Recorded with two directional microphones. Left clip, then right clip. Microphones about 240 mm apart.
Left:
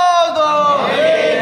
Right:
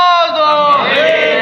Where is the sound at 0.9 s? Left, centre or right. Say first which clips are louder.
Right 2 dB; centre.